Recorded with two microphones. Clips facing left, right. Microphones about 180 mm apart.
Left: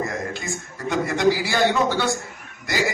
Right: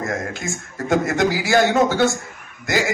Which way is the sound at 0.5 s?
45° right (ahead or behind).